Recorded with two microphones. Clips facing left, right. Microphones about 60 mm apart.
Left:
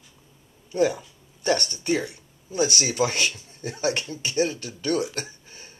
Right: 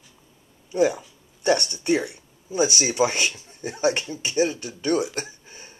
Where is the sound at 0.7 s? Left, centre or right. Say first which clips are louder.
Right 1 dB; centre.